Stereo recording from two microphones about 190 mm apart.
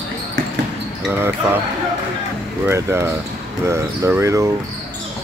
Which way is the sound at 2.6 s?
15° right (ahead or behind).